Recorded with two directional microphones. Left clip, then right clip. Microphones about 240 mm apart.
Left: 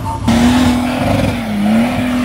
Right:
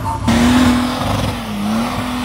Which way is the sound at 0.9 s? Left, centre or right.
Centre.